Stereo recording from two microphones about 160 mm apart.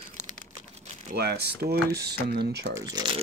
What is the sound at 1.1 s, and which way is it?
Speech, 85° right.